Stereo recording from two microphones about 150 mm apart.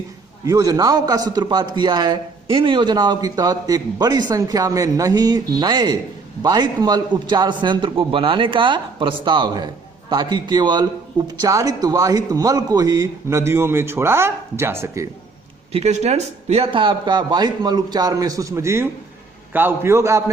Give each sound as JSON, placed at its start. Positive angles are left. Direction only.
{"t": 0.4, "sound": "a man's voice", "side_deg": -25}
{"t": 15.7, "sound": "a man's voice", "side_deg": -45}